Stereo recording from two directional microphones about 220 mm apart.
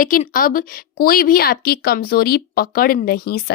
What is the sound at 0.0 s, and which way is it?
A woman's voice, 40° left (ahead or behind).